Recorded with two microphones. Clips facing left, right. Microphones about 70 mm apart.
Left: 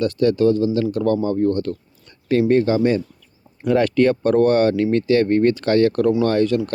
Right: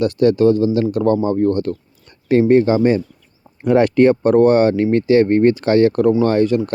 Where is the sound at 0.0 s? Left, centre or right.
Right.